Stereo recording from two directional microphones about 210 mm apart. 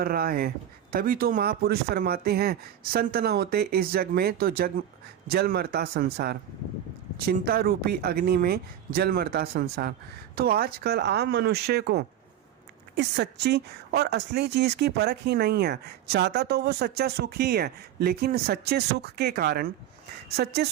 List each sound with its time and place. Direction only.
0.0 s speech: 45° right (ahead or behind)